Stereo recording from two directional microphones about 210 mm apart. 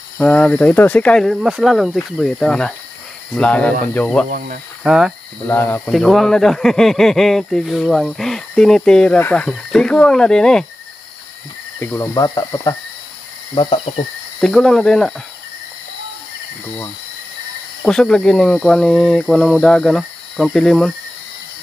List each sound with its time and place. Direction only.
0.2 s speech: 5° left (ahead or behind)
4.3 s speech: 40° right (ahead or behind)
4.8 s speech: 5° right (ahead or behind)
5.5 s speech: 10° left (ahead or behind)
11.8 s speech: 10° left (ahead or behind)
13.6 s cricket: 25° left (ahead or behind)
14.4 s speech: centre (ahead or behind)
17.8 s speech: 5° left (ahead or behind)